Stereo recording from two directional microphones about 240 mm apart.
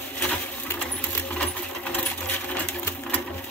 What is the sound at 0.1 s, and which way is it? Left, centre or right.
Sewing machine, centre.